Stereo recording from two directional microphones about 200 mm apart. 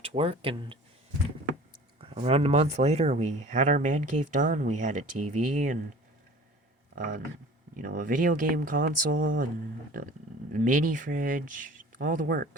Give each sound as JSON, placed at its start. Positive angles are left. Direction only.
{"t": 0.0, "sound": "speech", "side_deg": -30}
{"t": 2.0, "sound": "speech", "side_deg": -30}
{"t": 7.0, "sound": "speech", "side_deg": -40}
{"t": 10.5, "sound": "speech", "side_deg": -45}